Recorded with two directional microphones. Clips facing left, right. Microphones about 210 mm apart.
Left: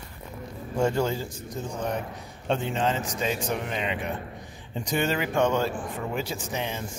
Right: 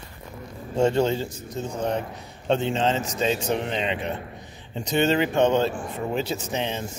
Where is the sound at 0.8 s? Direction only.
25° right (ahead or behind).